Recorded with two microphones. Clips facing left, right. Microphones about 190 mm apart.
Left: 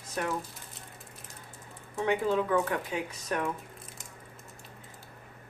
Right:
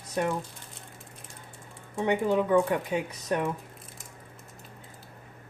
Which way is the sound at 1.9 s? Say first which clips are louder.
Right 2 dB; 20° right (ahead or behind).